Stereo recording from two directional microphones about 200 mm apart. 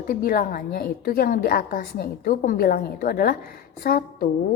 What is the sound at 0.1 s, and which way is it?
A woman's voice, 45° left (ahead or behind).